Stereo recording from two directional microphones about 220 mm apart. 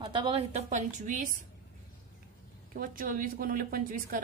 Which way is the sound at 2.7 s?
40° right (ahead or behind).